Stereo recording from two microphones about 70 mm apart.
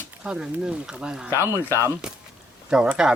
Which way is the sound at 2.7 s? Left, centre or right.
Centre.